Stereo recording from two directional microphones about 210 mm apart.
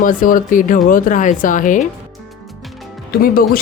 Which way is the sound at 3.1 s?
45° left (ahead or behind).